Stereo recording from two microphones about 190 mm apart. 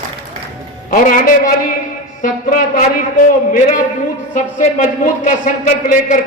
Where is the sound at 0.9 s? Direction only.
45° left (ahead or behind).